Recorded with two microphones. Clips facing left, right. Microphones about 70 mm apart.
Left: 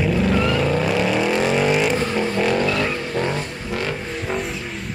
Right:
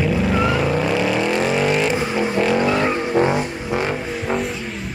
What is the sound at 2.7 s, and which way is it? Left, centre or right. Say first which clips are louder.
Vehicle: right 4 dB; right.